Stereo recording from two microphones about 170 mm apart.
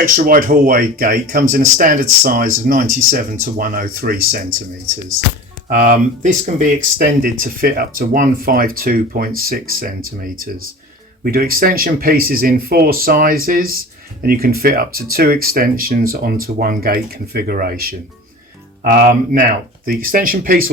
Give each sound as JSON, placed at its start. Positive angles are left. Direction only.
{"t": 0.0, "sound": "speech", "side_deg": -55}
{"t": 5.6, "sound": "speech", "side_deg": -55}
{"t": 6.7, "sound": "speech", "side_deg": -60}